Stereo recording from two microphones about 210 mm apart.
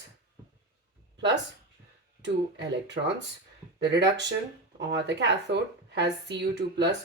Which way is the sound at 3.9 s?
55° right (ahead or behind).